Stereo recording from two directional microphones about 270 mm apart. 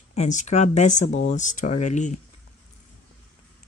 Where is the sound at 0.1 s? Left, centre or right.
Left.